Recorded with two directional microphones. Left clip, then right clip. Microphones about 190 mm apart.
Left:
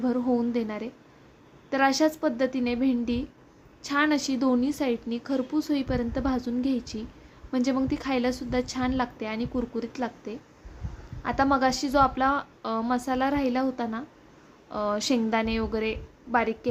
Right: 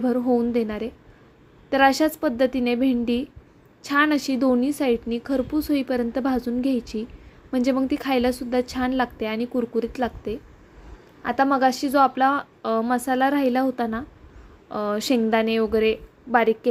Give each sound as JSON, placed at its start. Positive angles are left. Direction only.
{"t": 0.0, "sound": "a woman's voice", "side_deg": -15}